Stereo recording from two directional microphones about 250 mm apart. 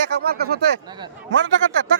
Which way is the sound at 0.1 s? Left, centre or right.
Right.